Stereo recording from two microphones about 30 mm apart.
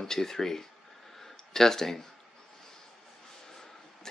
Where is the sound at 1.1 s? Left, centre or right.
Centre.